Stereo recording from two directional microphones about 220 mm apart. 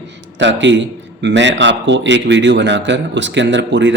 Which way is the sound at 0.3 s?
55° right (ahead or behind).